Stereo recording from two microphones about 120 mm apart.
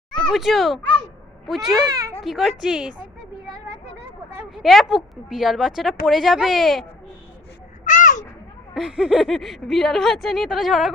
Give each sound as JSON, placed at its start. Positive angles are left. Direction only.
{"t": 0.2, "sound": "a child's voice", "side_deg": 0}
{"t": 1.9, "sound": "a child's voice", "side_deg": -30}
{"t": 2.2, "sound": "a woman's voice", "side_deg": 0}
{"t": 4.5, "sound": "a woman's voice", "side_deg": 0}
{"t": 7.9, "sound": "a sound", "side_deg": 90}
{"t": 8.7, "sound": "a woman's voice", "side_deg": -5}